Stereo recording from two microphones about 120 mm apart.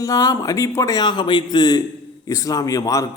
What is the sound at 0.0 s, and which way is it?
Speech, 30° left (ahead or behind).